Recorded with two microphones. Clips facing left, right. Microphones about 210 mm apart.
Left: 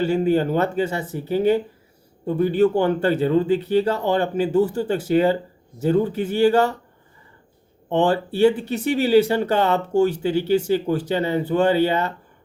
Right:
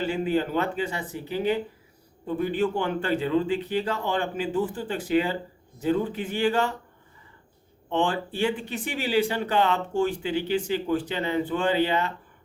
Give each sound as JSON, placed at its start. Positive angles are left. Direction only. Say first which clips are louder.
{"t": 0.0, "sound": "speech", "louder": "left 6 dB", "side_deg": 40}
{"t": 7.9, "sound": "speech", "louder": "left 6 dB", "side_deg": 40}